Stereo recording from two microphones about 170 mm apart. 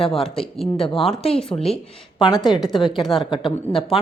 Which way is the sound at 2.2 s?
25° left (ahead or behind).